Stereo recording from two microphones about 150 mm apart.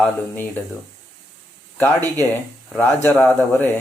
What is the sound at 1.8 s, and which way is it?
Speech, 15° left (ahead or behind).